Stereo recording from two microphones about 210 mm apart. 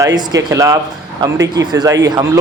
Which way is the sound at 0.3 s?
15° right (ahead or behind).